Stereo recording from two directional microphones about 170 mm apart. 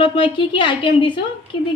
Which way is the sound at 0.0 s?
30° left (ahead or behind).